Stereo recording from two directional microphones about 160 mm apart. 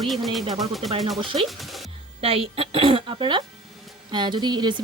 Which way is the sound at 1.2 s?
35° right (ahead or behind).